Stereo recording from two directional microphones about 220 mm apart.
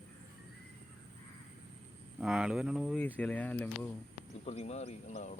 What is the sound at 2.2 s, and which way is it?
Speech, centre (ahead or behind).